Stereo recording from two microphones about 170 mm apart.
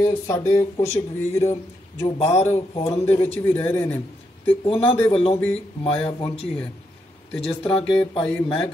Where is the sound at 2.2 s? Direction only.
40° left (ahead or behind).